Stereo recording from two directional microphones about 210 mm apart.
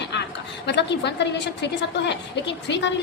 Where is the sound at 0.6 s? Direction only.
55° left (ahead or behind).